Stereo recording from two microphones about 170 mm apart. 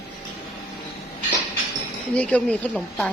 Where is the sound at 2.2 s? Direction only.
5° left (ahead or behind).